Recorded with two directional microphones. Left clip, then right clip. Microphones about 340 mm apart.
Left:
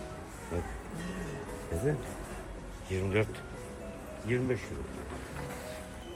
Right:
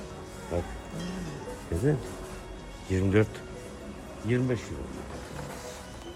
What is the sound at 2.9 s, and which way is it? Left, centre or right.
Speech, right.